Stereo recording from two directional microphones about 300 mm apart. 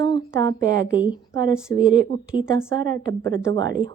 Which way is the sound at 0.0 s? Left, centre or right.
Centre.